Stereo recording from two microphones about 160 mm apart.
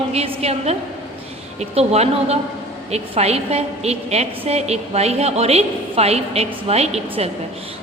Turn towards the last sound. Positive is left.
turn(degrees=-40)  # may be behind; listen again after turning